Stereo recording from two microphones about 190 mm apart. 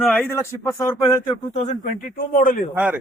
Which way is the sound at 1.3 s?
35° left (ahead or behind).